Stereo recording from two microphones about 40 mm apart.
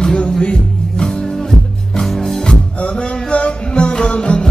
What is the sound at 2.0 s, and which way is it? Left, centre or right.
Music, centre.